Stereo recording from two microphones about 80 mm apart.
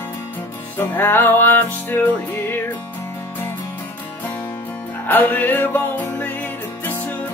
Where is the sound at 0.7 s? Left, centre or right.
Left.